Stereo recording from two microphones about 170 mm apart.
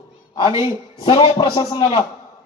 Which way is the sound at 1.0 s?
30° left (ahead or behind).